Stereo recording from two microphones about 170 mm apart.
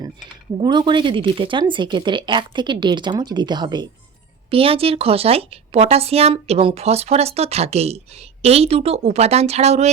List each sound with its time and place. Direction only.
0.6 s speech: 25° right (ahead or behind)